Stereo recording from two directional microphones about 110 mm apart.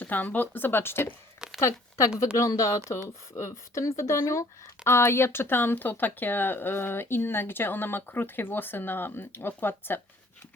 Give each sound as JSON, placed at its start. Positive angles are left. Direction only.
{"t": 0.0, "sound": "speech", "side_deg": 15}